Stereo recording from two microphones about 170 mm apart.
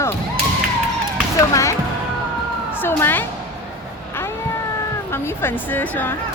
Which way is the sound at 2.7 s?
10° left (ahead or behind).